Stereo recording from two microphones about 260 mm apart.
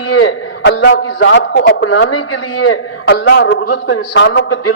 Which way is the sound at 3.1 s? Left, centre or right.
Left.